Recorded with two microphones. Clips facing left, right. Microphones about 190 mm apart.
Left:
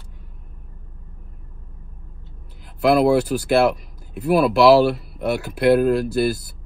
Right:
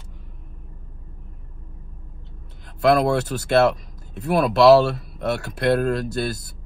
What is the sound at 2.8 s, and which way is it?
Speech, 5° left (ahead or behind).